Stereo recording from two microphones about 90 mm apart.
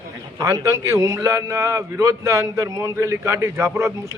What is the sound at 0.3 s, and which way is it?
Speech, 40° right (ahead or behind).